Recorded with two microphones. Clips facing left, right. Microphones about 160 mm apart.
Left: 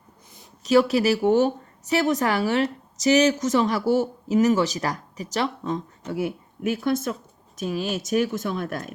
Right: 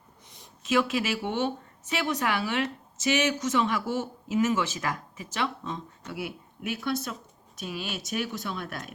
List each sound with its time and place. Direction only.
0.6 s a woman's voice: 40° left (ahead or behind)